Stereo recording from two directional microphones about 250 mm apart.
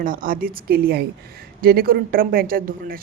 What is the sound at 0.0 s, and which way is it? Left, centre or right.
A woman's voice, right.